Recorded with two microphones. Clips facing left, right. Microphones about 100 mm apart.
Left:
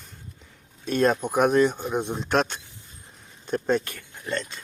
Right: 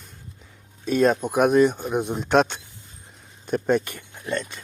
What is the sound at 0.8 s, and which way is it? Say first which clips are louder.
Speech: right 2 dB; centre (ahead or behind).